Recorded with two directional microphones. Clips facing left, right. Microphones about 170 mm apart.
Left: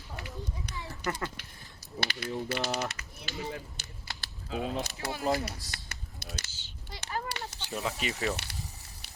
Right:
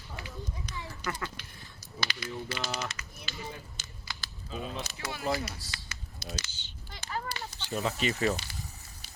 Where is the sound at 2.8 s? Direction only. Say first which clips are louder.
Left 3 dB; 60° left (ahead or behind).